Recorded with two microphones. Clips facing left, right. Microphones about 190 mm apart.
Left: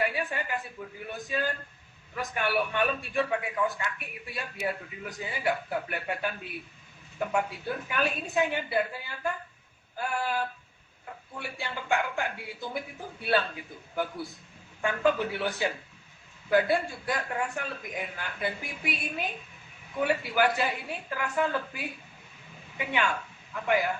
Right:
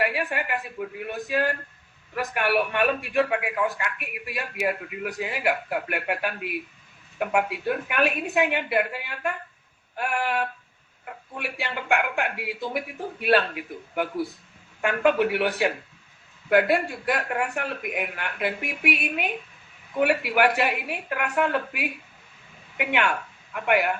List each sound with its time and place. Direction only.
0.0 s a sound: 70° right (ahead or behind)
2.1 s a man's voice: 70° right (ahead or behind)
7.2 s a man's voice: 65° right (ahead or behind)